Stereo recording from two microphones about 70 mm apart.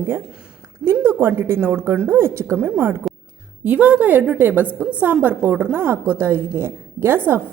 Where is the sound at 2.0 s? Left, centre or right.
Right.